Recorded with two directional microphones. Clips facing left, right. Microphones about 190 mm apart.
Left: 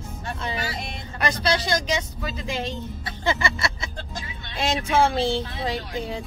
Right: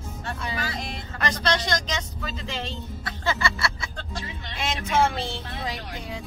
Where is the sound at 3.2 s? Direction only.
15° left (ahead or behind).